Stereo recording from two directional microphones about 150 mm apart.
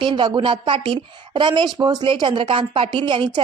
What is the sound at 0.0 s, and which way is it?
A woman's voice, 35° right (ahead or behind).